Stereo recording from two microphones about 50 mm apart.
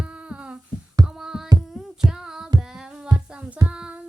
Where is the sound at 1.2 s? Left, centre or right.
Centre.